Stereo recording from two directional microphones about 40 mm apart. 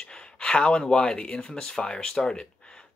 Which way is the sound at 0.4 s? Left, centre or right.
Left.